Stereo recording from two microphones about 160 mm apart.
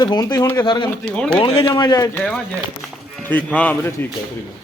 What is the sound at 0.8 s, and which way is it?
Speech, 5° left (ahead or behind).